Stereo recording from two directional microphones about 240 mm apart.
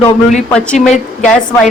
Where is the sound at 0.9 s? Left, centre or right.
Left.